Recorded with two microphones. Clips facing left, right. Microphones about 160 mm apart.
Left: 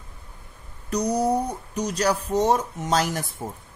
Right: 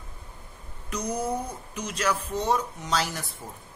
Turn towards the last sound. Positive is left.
turn(degrees=50)  # may be behind; listen again after turning